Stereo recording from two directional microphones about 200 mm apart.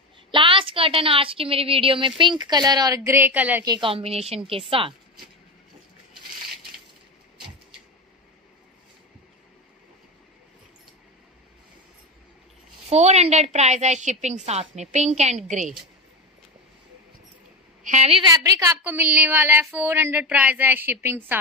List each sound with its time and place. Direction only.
0.3 s a woman's voice: 25° right (ahead or behind); by 3.6 s 10° right (ahead or behind)
3.6 s a woman's voice: 25° right (ahead or behind)
12.9 s a woman's voice: 35° right (ahead or behind)
17.8 s a woman's voice: 35° right (ahead or behind)
18.3 s speech: 15° right (ahead or behind)